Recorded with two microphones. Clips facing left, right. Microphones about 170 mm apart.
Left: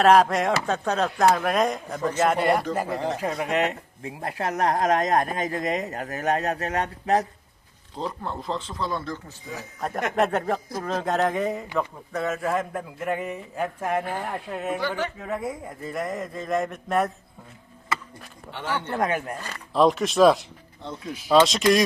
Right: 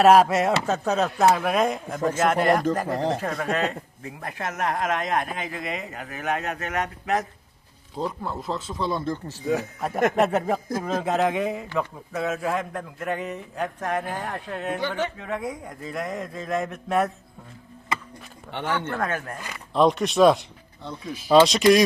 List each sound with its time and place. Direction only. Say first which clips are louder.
0.0 s a man's voice: right 2 dB; 5° right (ahead or behind)
2.8 s speech: right 2 dB; 40° right (ahead or behind)
3.4 s speech: left 1 dB; 20° left (ahead or behind)
7.9 s a man's voice: right 2 dB; 5° right (ahead or behind)
9.3 s speech: right 12 dB; 65° right (ahead or behind)
10.2 s a man's voice: right 1 dB; 5° right (ahead or behind)
14.8 s speech: even; 20° right (ahead or behind)
15.2 s a man's voice: even; centre (ahead or behind)
18.7 s speech: left 2 dB; 15° left (ahead or behind)
19.7 s a man's voice: even; centre (ahead or behind)